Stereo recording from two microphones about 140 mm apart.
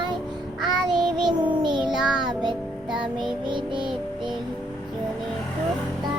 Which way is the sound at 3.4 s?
35° right (ahead or behind).